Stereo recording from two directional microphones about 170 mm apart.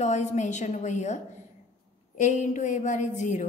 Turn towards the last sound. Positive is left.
turn(degrees=45)  # may be behind; listen again after turning